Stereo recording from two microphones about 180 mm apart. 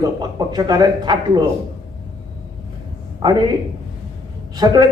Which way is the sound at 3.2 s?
25° right (ahead or behind).